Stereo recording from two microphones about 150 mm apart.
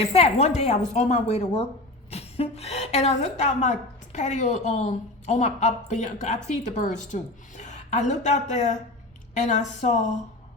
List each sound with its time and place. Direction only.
0.1 s a woman's voice: 45° left (ahead or behind)